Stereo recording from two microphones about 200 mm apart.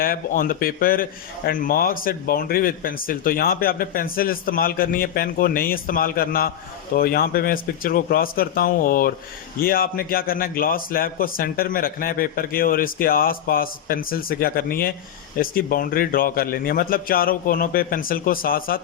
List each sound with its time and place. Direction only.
0.0 s a man's voice: 45° left (ahead or behind)